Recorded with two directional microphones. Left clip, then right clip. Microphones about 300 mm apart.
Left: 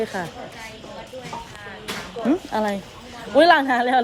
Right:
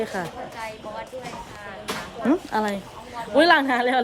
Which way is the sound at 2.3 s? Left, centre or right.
Centre.